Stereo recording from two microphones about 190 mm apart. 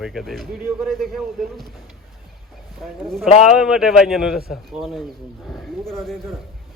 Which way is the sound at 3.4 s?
5° right (ahead or behind).